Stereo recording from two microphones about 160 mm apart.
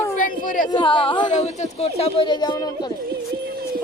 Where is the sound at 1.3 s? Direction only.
45° left (ahead or behind).